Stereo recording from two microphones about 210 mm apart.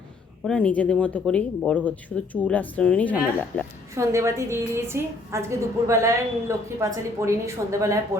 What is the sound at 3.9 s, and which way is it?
A woman's voice, 15° right (ahead or behind).